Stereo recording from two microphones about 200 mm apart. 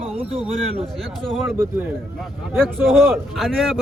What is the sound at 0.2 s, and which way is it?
Speech, 25° right (ahead or behind).